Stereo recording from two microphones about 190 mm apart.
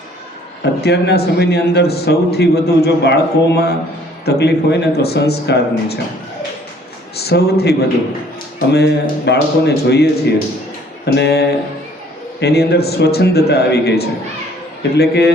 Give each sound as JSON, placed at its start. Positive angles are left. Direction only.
{"t": 0.6, "sound": "a man's voice", "side_deg": 60}
{"t": 7.3, "sound": "a man's voice", "side_deg": 55}
{"t": 11.0, "sound": "a sound", "side_deg": 60}
{"t": 12.4, "sound": "a man's voice", "side_deg": 55}